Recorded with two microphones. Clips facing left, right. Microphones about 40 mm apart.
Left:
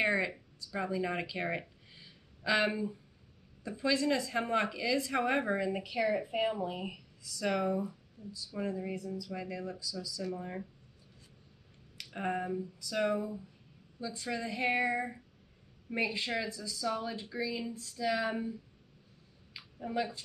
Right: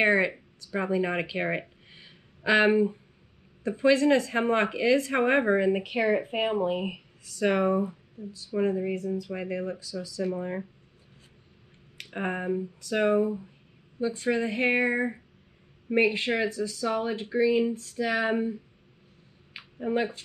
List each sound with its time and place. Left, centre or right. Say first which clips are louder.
0.0 s speech: right 8 dB; right
12.0 s speech: right 4 dB; right
19.5 s a sound: right 8 dB; right